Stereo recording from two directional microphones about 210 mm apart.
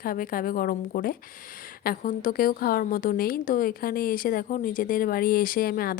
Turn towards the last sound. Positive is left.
turn(degrees=45)  # may be behind; listen again after turning